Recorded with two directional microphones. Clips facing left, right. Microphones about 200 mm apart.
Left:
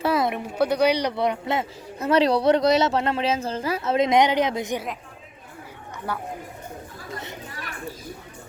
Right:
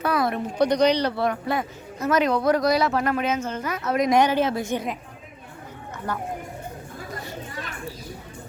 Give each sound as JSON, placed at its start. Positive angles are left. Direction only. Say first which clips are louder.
{"t": 0.0, "sound": "speech", "louder": "left 1 dB", "side_deg": 25}
{"t": 6.1, "sound": "speech", "louder": "right 1 dB", "side_deg": 10}